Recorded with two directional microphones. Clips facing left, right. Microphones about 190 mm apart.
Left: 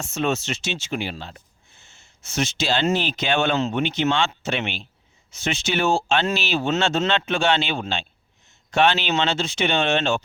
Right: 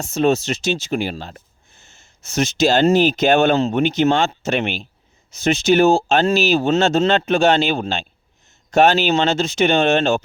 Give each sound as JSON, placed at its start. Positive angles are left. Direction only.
{"t": 0.0, "sound": "speech", "side_deg": -35}